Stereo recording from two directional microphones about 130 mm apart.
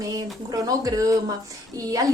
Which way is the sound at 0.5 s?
25° right (ahead or behind).